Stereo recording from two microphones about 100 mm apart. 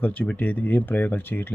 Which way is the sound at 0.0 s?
15° left (ahead or behind).